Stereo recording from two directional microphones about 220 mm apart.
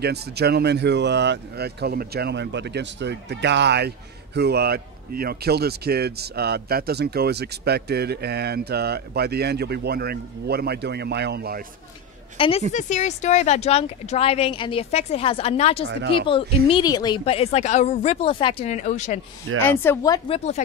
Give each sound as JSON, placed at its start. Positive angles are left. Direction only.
{"t": 0.0, "sound": "speech", "side_deg": -50}
{"t": 12.4, "sound": "speech", "side_deg": 25}
{"t": 19.6, "sound": "speech", "side_deg": 10}
{"t": 20.3, "sound": "speech", "side_deg": 30}